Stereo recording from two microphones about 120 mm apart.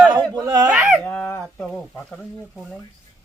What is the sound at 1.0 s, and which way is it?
Speech, 15° left (ahead or behind).